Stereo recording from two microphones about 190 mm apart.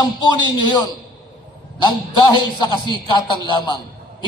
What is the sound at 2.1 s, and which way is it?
A man's voice, 25° left (ahead or behind).